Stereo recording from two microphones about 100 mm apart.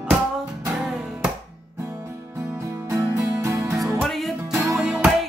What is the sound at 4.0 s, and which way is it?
Music, centre (ahead or behind).